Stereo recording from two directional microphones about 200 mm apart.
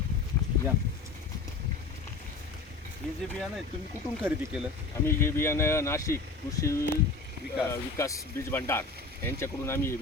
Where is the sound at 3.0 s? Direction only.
5° left (ahead or behind).